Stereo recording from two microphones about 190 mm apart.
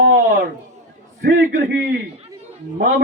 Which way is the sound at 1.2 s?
55° right (ahead or behind).